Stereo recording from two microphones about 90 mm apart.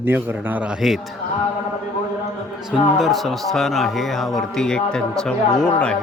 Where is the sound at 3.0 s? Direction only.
Centre (ahead or behind).